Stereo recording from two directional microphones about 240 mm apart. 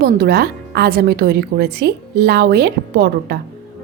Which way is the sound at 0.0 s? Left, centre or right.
Right.